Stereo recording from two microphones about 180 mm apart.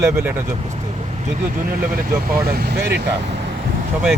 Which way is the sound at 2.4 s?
60° right (ahead or behind).